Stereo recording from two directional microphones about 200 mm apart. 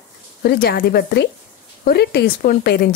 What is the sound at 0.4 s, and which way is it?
Speech, 50° left (ahead or behind).